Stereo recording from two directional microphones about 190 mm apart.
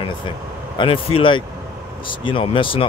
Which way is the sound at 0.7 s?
30° left (ahead or behind).